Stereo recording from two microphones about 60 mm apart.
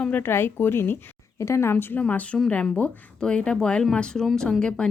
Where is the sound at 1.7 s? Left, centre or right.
Left.